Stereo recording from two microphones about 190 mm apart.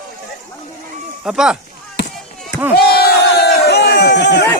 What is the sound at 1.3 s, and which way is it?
Speech, 5° right (ahead or behind).